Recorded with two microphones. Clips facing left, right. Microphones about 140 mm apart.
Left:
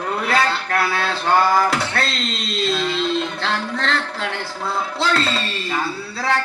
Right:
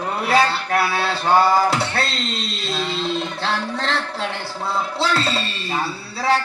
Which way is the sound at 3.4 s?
30° right (ahead or behind).